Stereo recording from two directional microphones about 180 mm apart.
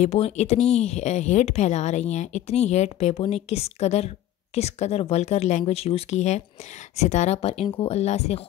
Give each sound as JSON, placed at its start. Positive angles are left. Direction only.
{"t": 0.0, "sound": "speech", "side_deg": 35}